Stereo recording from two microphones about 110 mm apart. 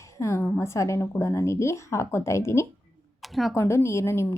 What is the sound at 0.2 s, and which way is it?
A woman's voice, 25° left (ahead or behind).